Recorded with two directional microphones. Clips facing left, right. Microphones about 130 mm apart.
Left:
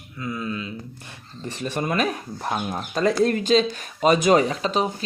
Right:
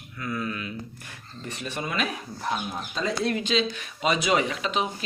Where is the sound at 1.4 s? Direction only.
40° left (ahead or behind).